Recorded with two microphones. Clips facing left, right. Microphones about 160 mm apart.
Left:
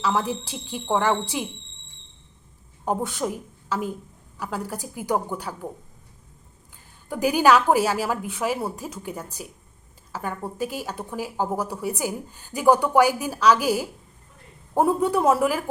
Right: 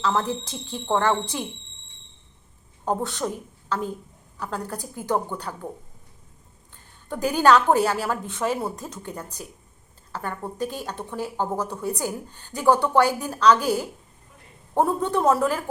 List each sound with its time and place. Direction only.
0.0 s speech: 10° left (ahead or behind)
2.8 s a woman's voice: 10° left (ahead or behind)
7.1 s speech: 10° left (ahead or behind)